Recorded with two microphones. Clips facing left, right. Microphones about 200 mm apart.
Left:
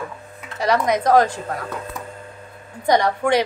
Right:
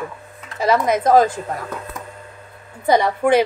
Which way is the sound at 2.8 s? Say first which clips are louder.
Right 2 dB; 5° right (ahead or behind).